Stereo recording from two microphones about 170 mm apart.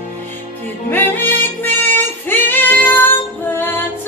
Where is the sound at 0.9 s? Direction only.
10° left (ahead or behind).